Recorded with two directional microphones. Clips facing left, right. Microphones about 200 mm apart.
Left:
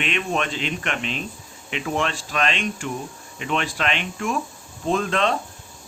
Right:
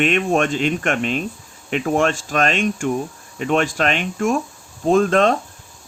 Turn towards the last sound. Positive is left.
turn(degrees=-45)  # may be behind; listen again after turning